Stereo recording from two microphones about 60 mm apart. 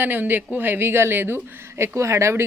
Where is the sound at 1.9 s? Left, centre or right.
Right.